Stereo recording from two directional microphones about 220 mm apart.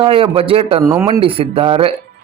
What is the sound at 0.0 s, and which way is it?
Speech, 25° right (ahead or behind).